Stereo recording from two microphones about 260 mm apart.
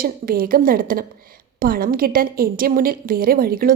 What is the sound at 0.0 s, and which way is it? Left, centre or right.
A woman's voice, right.